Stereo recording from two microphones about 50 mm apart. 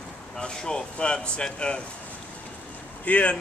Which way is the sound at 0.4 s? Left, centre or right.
Centre.